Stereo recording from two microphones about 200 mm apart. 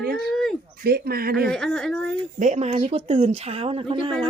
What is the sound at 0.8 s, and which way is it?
Speech, 50° right (ahead or behind).